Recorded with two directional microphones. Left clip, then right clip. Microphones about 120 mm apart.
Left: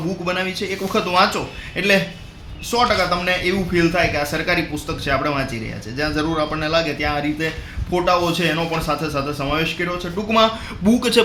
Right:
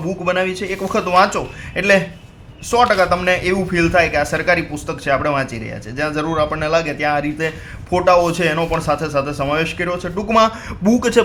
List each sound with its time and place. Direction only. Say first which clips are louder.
0.3 s a man's voice: right 5 dB; 40° right (ahead or behind)